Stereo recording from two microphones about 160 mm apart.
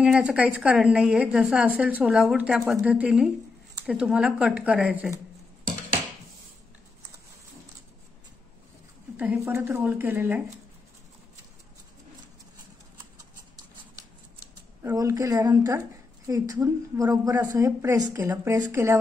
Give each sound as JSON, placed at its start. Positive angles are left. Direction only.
{"t": 0.0, "sound": "a woman's voice", "side_deg": -5}
{"t": 9.1, "sound": "a woman's voice", "side_deg": -10}
{"t": 14.8, "sound": "a woman's voice", "side_deg": -20}